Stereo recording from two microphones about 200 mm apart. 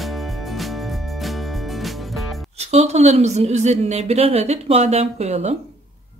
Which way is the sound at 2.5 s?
30° right (ahead or behind).